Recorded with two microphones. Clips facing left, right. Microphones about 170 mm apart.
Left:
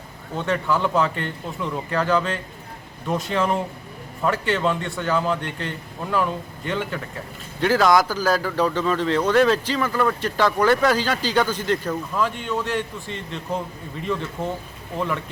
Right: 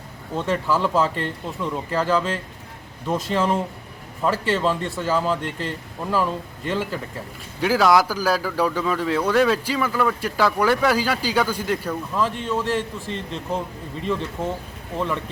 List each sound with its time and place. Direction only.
0.3 s a man's voice: centre (ahead or behind)
14.9 s a man's voice: centre (ahead or behind)